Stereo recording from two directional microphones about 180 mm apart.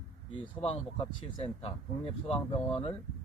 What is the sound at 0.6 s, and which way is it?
Speech, 30° left (ahead or behind).